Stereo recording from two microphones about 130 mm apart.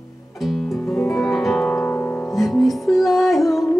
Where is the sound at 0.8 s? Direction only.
15° left (ahead or behind).